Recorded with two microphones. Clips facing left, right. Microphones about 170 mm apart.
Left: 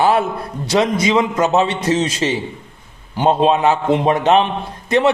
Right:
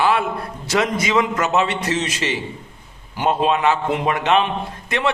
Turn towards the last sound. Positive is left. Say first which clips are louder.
# left 7 dB
turn(degrees=35)  # may be behind; listen again after turning